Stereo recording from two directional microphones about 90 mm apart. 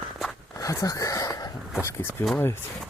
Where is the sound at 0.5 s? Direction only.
40° left (ahead or behind).